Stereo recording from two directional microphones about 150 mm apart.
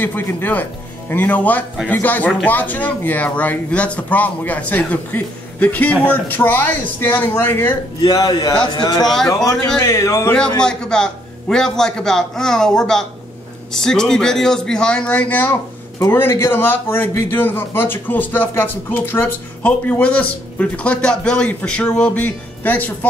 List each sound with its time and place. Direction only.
0.0 s a man's voice: 10° left (ahead or behind)
8.0 s speech: 25° left (ahead or behind)
9.0 s a man's voice: centre (ahead or behind)
9.3 s speech: 20° left (ahead or behind)
10.6 s a man's voice: 5° left (ahead or behind)